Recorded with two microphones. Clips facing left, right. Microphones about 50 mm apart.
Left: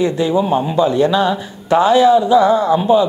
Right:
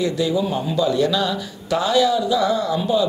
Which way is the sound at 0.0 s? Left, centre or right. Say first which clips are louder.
Left 5 dB; left.